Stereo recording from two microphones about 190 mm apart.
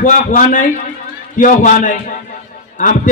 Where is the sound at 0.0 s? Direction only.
45° left (ahead or behind).